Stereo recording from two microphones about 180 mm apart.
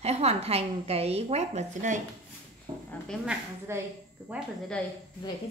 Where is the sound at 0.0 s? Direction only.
35° right (ahead or behind).